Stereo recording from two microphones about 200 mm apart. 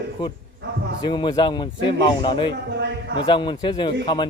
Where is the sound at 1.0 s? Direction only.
20° left (ahead or behind).